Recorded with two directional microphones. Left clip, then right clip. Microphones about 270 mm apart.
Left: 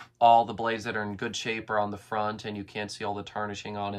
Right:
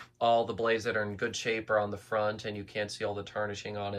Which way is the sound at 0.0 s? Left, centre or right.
Centre.